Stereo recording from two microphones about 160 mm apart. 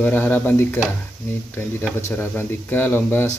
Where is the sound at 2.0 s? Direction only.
15° left (ahead or behind).